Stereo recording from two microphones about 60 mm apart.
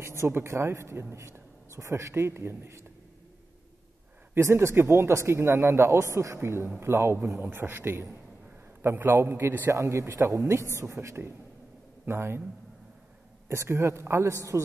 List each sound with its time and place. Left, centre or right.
0.0 s speech: right
1.7 s speech: right
4.4 s a man's voice: right
9.2 s a woman's voice: right
13.5 s speech: right